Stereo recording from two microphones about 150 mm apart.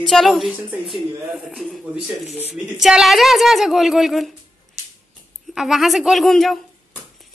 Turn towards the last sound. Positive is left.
turn(degrees=0)  # may be behind; listen again after turning